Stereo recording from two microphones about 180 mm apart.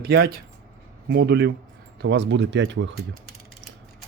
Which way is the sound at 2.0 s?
70° right (ahead or behind).